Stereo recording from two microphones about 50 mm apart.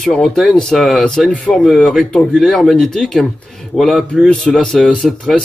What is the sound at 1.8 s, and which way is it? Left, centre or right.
Speech, centre.